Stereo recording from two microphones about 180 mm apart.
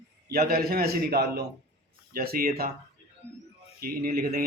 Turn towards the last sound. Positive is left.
turn(degrees=-60)  # may be behind; listen again after turning